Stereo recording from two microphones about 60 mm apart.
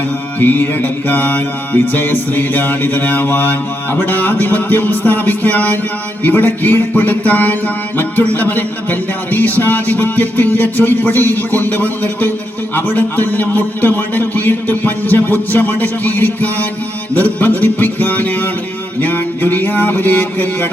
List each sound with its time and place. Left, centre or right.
0.3 s mantra: left